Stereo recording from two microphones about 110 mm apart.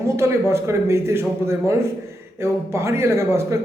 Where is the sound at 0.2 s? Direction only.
25° right (ahead or behind).